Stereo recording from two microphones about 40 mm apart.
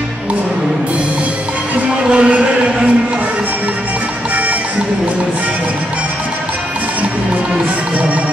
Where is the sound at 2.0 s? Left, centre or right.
Right.